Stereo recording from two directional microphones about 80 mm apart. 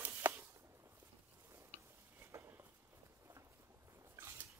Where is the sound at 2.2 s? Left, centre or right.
Right.